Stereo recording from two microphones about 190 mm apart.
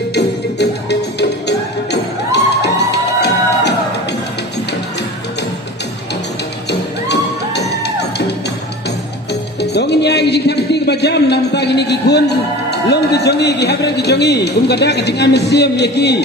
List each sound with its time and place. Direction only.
0.1 s music: 65° left (ahead or behind)
6.7 s music: 65° left (ahead or behind)
9.6 s music: 60° left (ahead or behind)